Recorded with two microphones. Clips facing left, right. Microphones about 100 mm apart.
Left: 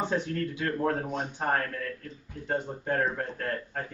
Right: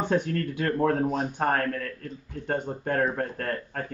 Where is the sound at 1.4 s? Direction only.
55° right (ahead or behind).